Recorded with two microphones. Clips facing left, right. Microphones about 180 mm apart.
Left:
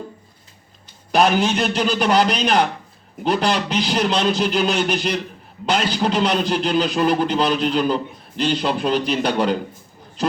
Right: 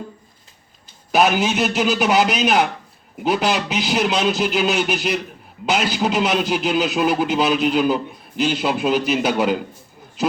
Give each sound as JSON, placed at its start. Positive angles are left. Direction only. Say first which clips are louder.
{"t": 1.1, "sound": "a man's voice", "louder": "even", "side_deg": -5}